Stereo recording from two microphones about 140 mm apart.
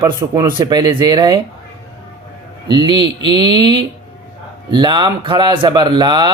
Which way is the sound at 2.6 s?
35° right (ahead or behind).